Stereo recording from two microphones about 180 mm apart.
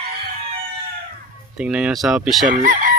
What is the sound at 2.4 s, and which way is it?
Chicken, 50° right (ahead or behind).